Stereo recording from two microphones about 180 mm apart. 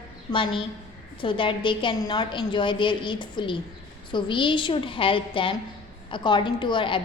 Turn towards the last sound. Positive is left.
turn(degrees=25)  # may be behind; listen again after turning